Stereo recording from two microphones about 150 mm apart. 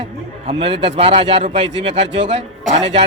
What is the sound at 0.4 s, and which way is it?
A man's voice, 40° right (ahead or behind).